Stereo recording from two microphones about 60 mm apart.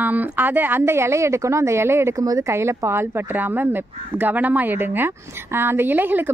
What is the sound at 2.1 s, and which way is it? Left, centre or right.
Speech, right.